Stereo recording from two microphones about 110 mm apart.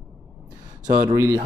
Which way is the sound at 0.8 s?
35° right (ahead or behind).